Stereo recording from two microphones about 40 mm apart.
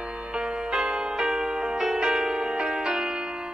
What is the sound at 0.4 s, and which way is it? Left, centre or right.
Music, centre.